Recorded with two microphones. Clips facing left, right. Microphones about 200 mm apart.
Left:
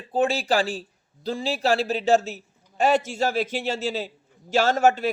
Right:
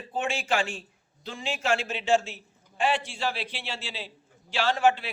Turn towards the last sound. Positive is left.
turn(degrees=45)  # may be behind; listen again after turning